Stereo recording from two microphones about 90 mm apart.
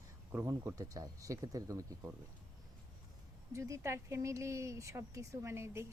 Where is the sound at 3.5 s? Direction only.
35° right (ahead or behind).